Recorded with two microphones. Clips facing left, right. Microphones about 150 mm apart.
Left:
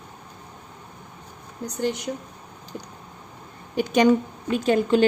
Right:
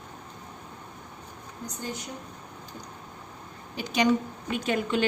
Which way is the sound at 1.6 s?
80° left.